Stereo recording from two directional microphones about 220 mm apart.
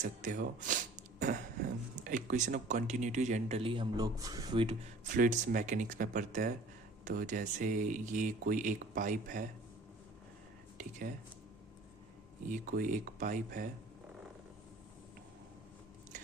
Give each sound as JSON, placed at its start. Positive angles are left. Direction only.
{"t": 0.0, "sound": "speech", "side_deg": -35}
{"t": 5.0, "sound": "speech", "side_deg": -35}
{"t": 12.5, "sound": "speech", "side_deg": -40}